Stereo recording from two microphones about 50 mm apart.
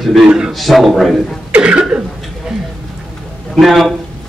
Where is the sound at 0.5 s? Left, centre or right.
Centre.